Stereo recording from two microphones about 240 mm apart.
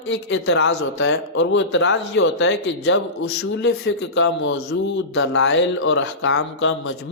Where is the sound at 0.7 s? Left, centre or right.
Left.